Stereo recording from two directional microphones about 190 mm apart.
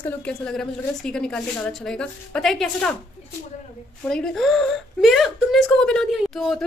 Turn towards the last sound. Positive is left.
turn(degrees=0)  # may be behind; listen again after turning